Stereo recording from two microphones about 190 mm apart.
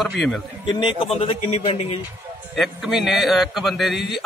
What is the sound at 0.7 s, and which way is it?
A man's voice, 25° left (ahead or behind).